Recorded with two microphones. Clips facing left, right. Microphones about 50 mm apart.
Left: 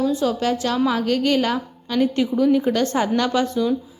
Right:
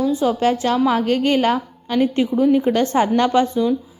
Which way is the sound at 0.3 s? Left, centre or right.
Right.